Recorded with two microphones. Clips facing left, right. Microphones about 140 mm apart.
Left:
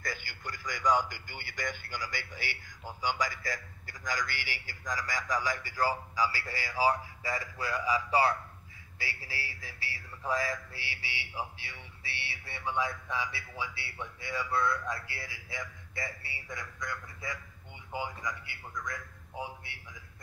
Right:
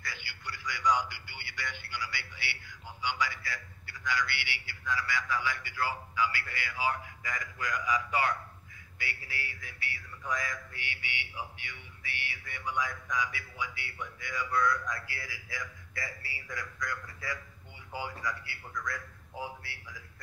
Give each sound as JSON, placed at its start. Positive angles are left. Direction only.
{"t": 0.0, "sound": "a man's voice", "side_deg": 45}